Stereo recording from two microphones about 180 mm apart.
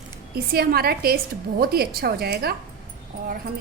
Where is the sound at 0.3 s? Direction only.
55° right (ahead or behind).